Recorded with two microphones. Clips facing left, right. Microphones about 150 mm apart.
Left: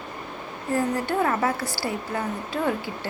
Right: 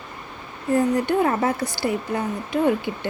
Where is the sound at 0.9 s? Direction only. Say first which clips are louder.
Right 4 dB; 20° right (ahead or behind).